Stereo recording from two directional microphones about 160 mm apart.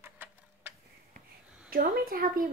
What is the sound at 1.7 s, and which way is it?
Speech, 65° right (ahead or behind).